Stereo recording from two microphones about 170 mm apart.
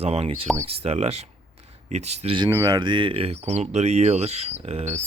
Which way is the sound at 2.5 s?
20° right (ahead or behind).